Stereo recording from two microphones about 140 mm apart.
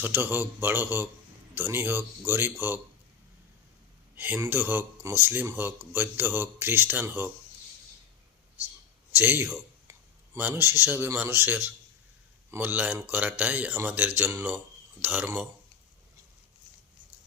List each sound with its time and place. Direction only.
0.0 s speech: 15° right (ahead or behind)
4.1 s speech: 15° right (ahead or behind)
9.1 s speech: 15° right (ahead or behind)